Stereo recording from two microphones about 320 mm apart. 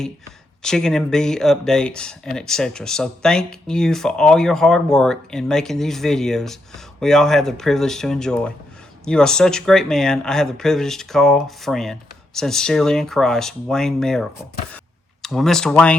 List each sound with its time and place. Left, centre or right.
0.6 s speech: centre